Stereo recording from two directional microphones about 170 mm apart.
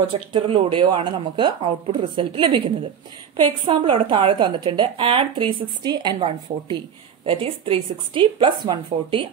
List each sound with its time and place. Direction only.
0.3 s a woman's voice: 30° right (ahead or behind)